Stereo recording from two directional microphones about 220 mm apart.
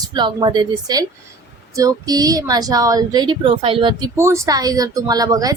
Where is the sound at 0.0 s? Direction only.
20° right (ahead or behind).